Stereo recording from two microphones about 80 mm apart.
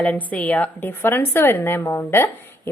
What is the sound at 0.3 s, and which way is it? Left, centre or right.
A woman's voice, centre.